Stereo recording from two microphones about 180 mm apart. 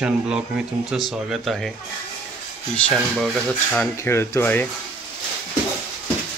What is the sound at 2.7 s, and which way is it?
Speech, 5° left (ahead or behind).